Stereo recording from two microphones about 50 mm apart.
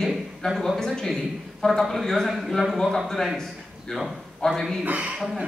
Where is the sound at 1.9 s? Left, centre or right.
Centre.